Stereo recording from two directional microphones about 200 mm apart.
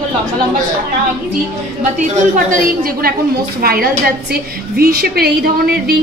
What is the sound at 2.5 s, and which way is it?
A woman's voice, 45° right (ahead or behind).